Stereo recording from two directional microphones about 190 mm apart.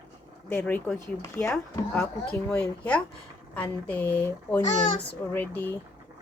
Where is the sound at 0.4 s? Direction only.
5° left (ahead or behind).